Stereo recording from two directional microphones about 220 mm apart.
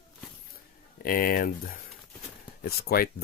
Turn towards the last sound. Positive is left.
turn(degrees=45)  # may be behind; listen again after turning